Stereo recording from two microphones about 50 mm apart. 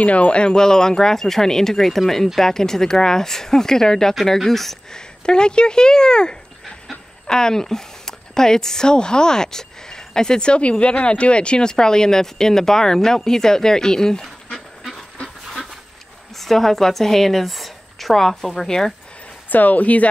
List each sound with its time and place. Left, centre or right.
0.0 s speech: left; by 5.0 s centre
5.2 s speech: centre
15.2 s pant: centre
16.3 s a woman's voice: centre
19.5 s speech: left